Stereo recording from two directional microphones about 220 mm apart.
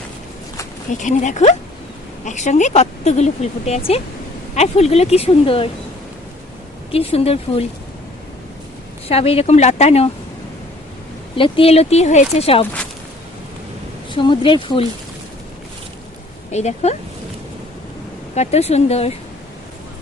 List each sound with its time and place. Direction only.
0.9 s speech: 35° left (ahead or behind)
6.9 s speech: 25° left (ahead or behind)
9.0 s speech: 25° left (ahead or behind)
11.3 s speech: 25° left (ahead or behind)
14.1 s speech: 20° left (ahead or behind)
16.5 s speech: 30° left (ahead or behind)
18.3 s speech: 30° left (ahead or behind)